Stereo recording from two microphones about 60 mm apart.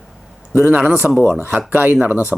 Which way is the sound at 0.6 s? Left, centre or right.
Right.